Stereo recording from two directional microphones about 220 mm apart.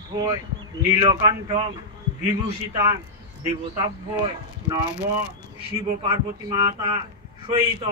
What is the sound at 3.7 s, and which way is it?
Speech, 20° right (ahead or behind).